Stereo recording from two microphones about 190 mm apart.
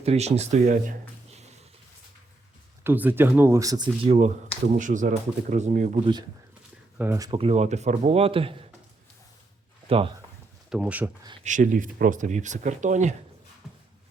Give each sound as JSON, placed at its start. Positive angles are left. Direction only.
{"t": 0.0, "sound": "speech", "side_deg": -35}
{"t": 2.8, "sound": "speech", "side_deg": -10}
{"t": 4.8, "sound": "speech", "side_deg": -45}
{"t": 7.0, "sound": "speech", "side_deg": -10}
{"t": 7.3, "sound": "speech", "side_deg": -30}
{"t": 10.7, "sound": "speech", "side_deg": -5}
{"t": 11.4, "sound": "speech", "side_deg": -45}
{"t": 13.6, "sound": "a sound", "side_deg": 0}